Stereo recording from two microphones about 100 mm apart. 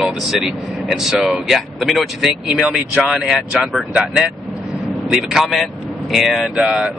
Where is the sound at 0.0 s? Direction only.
Centre (ahead or behind).